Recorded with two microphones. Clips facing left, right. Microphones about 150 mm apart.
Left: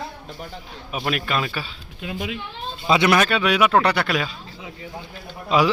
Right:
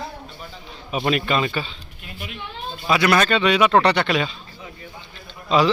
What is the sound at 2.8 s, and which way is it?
Speech, 20° left (ahead or behind).